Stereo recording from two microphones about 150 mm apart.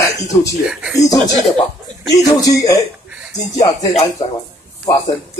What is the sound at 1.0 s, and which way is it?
Speech, 20° left (ahead or behind).